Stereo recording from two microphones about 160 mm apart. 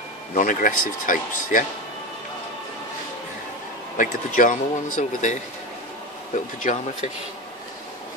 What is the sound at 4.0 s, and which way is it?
Speech, 55° left (ahead or behind).